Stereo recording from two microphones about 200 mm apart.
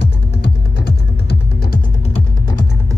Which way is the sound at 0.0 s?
60° left (ahead or behind).